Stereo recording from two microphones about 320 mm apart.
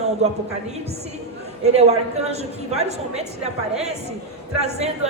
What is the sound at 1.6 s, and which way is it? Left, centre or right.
Speech, centre.